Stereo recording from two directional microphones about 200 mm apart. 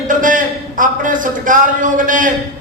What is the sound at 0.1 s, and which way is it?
A man's voice, 40° right (ahead or behind).